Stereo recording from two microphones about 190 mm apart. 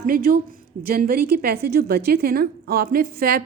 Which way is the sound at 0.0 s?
50° right (ahead or behind).